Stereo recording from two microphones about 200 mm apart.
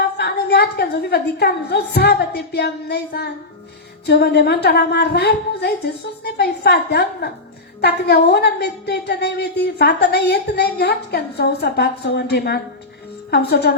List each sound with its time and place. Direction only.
0.0 s a woman's voice: 55° left (ahead or behind)